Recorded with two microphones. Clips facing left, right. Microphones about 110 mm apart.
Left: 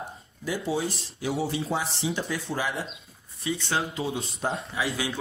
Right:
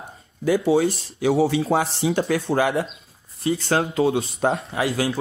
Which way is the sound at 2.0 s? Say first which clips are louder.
Right 8 dB; 70° right (ahead or behind).